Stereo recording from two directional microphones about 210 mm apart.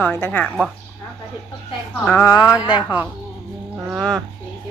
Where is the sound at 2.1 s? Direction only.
10° left (ahead or behind).